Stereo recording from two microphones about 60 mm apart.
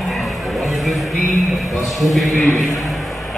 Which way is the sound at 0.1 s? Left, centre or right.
Centre.